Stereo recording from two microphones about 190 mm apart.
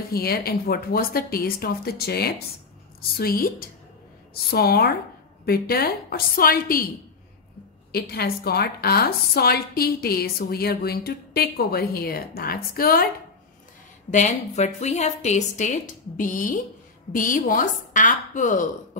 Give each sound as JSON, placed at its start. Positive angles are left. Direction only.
{"t": 0.1, "sound": "a woman's voice", "side_deg": 55}
{"t": 7.9, "sound": "a woman's voice", "side_deg": 55}
{"t": 14.1, "sound": "a woman's voice", "side_deg": 40}